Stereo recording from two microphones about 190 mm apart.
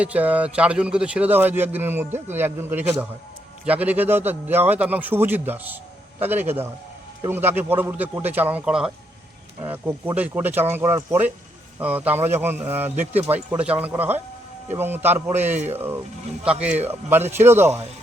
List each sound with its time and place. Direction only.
0.0 s a man's voice: 10° right (ahead or behind)